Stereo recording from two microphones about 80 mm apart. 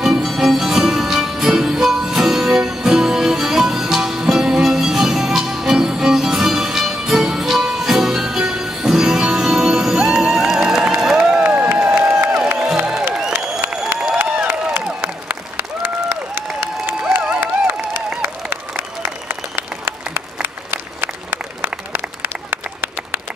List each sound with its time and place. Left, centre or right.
0.0 s music: centre
11.4 s crowd: centre
13.3 s applause: right
14.4 s a sound: right
15.0 s applause: right
17.4 s a sound: right
19.0 s applause: right